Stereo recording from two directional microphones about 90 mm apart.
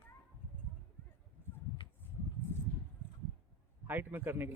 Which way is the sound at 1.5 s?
25° left (ahead or behind).